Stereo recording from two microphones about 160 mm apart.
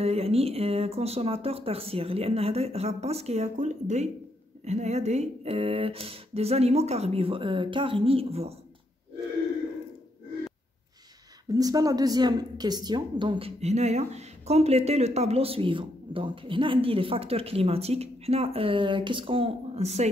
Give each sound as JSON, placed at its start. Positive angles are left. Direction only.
{"t": 0.0, "sound": "speech", "side_deg": -40}
{"t": 11.5, "sound": "a woman's voice", "side_deg": -25}
{"t": 13.6, "sound": "speech", "side_deg": -45}